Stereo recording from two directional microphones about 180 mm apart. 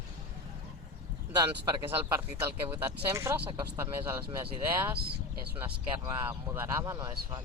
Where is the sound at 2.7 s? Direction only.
15° right (ahead or behind).